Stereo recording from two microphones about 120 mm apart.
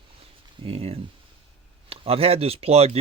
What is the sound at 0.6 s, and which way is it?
Speech, 55° right (ahead or behind).